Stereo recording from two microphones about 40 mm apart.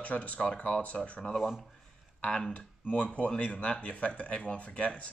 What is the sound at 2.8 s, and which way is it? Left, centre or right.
Speech, left.